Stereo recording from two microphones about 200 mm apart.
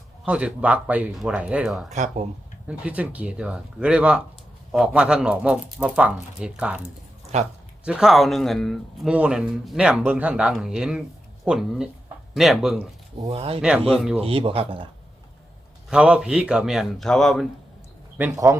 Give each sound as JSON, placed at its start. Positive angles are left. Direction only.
{"t": 0.3, "sound": "speech", "side_deg": -5}
{"t": 1.9, "sound": "speech", "side_deg": -35}
{"t": 2.6, "sound": "speech", "side_deg": -5}
{"t": 7.3, "sound": "speech", "side_deg": -35}
{"t": 7.9, "sound": "speech", "side_deg": -5}
{"t": 13.2, "sound": "speech", "side_deg": -30}
{"t": 13.6, "sound": "speech", "side_deg": -5}
{"t": 14.2, "sound": "speech", "side_deg": -25}
{"t": 15.9, "sound": "speech", "side_deg": -5}
{"t": 18.2, "sound": "speech", "side_deg": -15}